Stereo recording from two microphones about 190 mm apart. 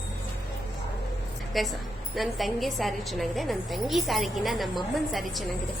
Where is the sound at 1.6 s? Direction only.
Centre (ahead or behind).